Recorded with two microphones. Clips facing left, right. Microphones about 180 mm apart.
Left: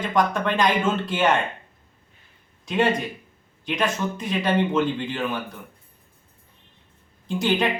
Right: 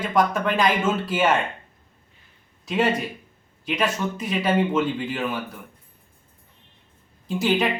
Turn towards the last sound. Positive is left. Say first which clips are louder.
# right 1 dB
turn(degrees=-5)  # may be behind; listen again after turning